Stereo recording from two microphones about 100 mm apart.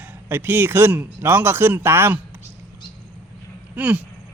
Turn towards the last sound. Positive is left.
turn(degrees=-15)  # may be behind; listen again after turning